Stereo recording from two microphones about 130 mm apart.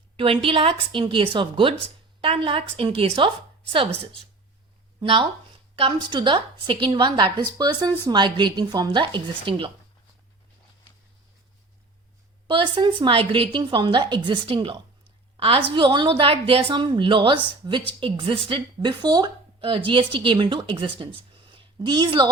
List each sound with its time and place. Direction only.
0.2 s a woman's voice: 45° right (ahead or behind)
12.5 s a woman's voice: 40° right (ahead or behind)